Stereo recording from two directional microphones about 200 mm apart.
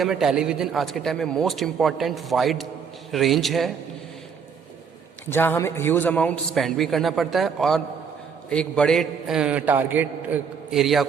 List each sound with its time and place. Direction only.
0.0 s a man's voice: centre (ahead or behind)
5.2 s a man's voice: 10° left (ahead or behind)